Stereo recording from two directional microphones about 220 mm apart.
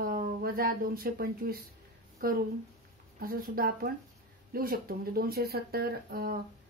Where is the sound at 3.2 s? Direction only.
40° right (ahead or behind).